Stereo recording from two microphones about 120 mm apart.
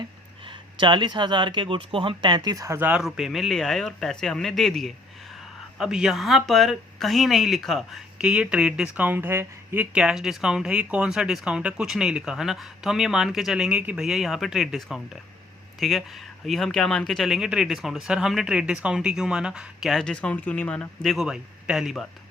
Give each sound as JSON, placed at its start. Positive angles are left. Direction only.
{"t": 0.0, "sound": "speech", "side_deg": -45}
{"t": 2.7, "sound": "speech", "side_deg": -15}
{"t": 3.0, "sound": "speech", "side_deg": 0}
{"t": 9.9, "sound": "speech", "side_deg": -5}